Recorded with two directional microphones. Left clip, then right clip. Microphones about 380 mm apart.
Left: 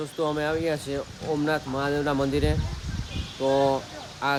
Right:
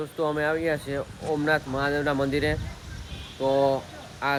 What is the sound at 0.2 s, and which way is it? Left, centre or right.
Speech, centre.